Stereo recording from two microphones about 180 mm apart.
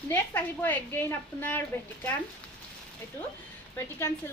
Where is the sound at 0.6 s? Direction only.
10° left (ahead or behind).